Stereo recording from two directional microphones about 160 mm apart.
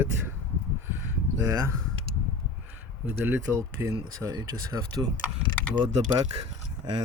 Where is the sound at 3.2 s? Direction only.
15° right (ahead or behind).